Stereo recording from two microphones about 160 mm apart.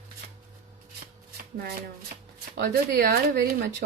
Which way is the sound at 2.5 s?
80° right.